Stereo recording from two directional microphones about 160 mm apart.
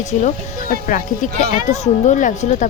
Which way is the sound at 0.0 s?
45° left (ahead or behind).